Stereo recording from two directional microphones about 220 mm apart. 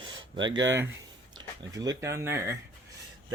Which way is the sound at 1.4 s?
20° right (ahead or behind).